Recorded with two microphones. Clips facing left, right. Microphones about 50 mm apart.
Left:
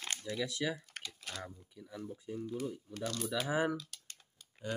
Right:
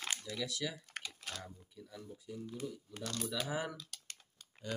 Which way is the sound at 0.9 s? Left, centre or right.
Centre.